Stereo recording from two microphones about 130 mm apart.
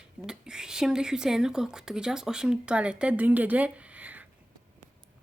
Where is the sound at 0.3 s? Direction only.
5° right (ahead or behind).